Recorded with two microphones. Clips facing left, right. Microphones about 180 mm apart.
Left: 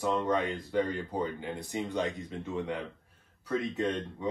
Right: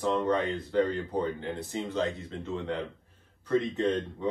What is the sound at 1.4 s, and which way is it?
Speech, 10° left (ahead or behind).